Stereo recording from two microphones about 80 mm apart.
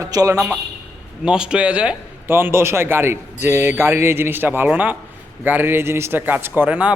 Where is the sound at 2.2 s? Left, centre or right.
Right.